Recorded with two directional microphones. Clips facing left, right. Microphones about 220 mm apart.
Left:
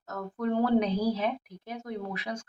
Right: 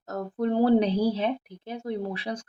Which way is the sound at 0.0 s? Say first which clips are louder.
Right 4 dB; 35° right (ahead or behind).